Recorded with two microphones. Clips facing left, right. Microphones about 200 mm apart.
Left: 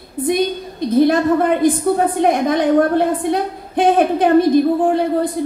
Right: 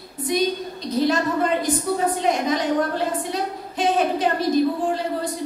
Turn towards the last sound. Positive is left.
turn(degrees=55)  # may be behind; listen again after turning